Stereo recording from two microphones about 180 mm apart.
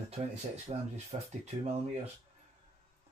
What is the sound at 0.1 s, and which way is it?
Speech, 35° right (ahead or behind).